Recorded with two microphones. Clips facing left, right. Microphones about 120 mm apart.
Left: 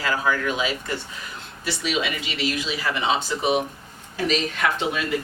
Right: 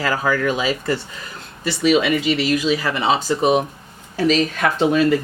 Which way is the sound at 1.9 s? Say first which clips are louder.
Right 12 dB; 50° right (ahead or behind).